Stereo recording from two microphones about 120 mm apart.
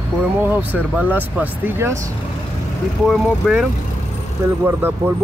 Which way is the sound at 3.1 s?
5° right (ahead or behind).